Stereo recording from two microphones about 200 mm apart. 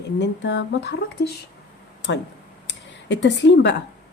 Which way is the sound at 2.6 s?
60° left (ahead or behind).